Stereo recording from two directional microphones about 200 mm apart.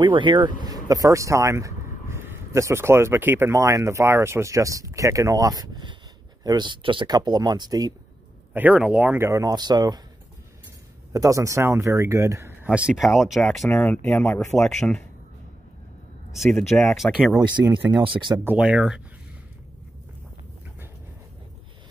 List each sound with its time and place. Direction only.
0.0 s speech: 25° right (ahead or behind)
8.5 s speech: 5° right (ahead or behind)
11.1 s speech: 15° right (ahead or behind); by 15.0 s 5° left (ahead or behind)
16.3 s speech: 5° left (ahead or behind)
17.4 s speech: 20° right (ahead or behind)
18.4 s speech: 5° right (ahead or behind)